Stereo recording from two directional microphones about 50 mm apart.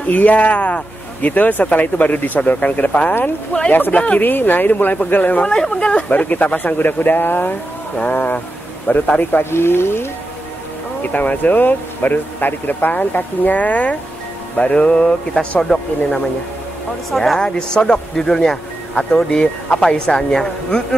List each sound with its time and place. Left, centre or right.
0.0 s speech: left
5.4 s speech: centre; by 7.5 s left
8.0 s speech: left
9.4 s speech: left
11.0 s a man's voice: left; by 16.3 s centre
17.1 s speech: centre
17.4 s a man's voice: centre